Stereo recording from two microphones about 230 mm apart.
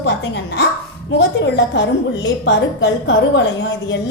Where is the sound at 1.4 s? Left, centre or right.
Left.